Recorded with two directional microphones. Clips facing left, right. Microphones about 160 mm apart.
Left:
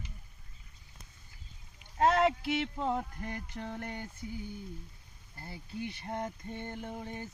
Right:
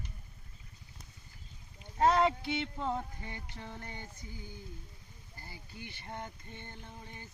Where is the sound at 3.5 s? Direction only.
55° left (ahead or behind).